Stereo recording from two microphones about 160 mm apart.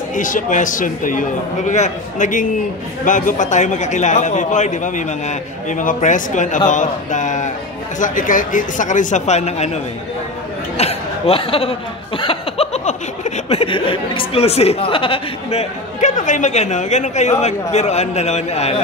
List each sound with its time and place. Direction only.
0.1 s a man's voice: 55° left (ahead or behind)
10.8 s a sound: 40° left (ahead or behind)
12.2 s speech: 35° left (ahead or behind)
16.0 s a man's voice: 50° left (ahead or behind)